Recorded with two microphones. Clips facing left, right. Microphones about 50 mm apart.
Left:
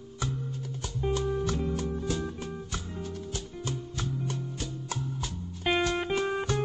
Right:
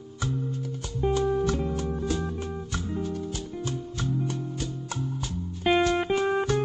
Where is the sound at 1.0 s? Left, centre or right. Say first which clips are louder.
Right 5 dB; right.